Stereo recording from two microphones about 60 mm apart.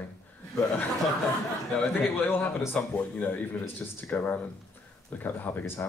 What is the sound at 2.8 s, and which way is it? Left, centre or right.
Speech, left.